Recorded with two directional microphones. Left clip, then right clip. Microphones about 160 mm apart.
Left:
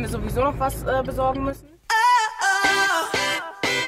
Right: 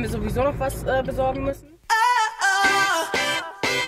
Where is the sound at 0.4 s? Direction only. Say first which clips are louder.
Left 1 dB; centre (ahead or behind).